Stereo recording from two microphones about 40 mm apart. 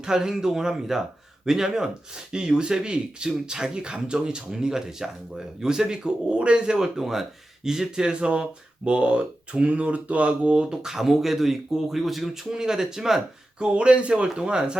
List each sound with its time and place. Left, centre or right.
0.0 s speech: centre
10.7 s speech: centre
13.6 s speech: right